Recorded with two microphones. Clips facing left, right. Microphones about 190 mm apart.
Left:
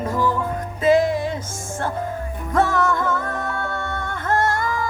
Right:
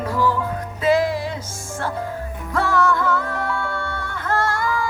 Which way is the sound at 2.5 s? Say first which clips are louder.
Even; 50° left (ahead or behind).